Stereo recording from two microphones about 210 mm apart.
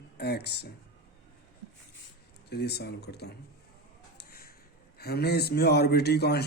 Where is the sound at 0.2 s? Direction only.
50° left (ahead or behind).